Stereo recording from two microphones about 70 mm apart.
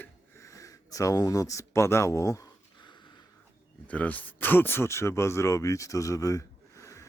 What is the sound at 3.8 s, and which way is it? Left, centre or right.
Speech, left.